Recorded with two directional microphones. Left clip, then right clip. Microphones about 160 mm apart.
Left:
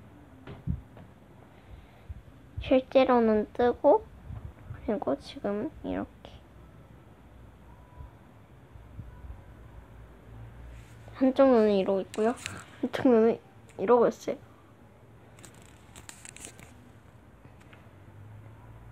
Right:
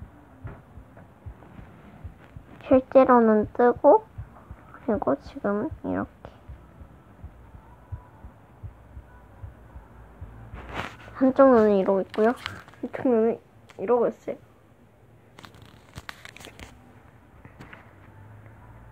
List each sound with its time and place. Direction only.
2.6 s a woman's voice: 10° right (ahead or behind)
5.5 s a woman's voice: centre (ahead or behind)
11.3 s speech: 10° right (ahead or behind)
12.8 s speech: 30° left (ahead or behind)